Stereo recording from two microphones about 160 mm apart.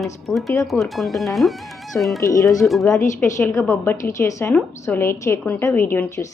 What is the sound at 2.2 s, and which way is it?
Speech, 20° left (ahead or behind).